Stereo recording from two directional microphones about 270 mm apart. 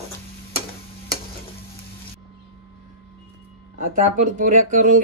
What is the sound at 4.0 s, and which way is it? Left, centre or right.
Speech, right.